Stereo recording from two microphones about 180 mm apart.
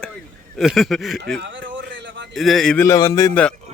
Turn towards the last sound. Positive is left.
turn(degrees=15)  # may be behind; listen again after turning